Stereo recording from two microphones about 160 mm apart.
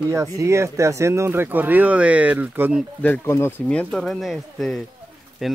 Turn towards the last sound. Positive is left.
turn(degrees=0)  # may be behind; listen again after turning